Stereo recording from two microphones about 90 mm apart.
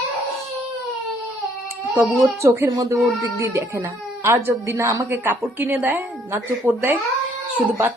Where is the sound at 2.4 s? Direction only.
30° right (ahead or behind).